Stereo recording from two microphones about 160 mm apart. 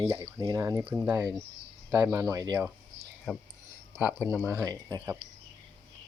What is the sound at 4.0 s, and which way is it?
Speech, 10° right (ahead or behind).